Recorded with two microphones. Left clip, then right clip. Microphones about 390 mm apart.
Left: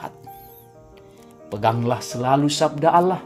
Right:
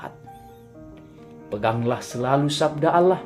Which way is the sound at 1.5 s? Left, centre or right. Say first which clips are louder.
Left 2 dB; left.